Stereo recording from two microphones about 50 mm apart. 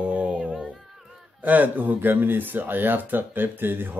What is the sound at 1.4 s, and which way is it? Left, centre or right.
Speech, right.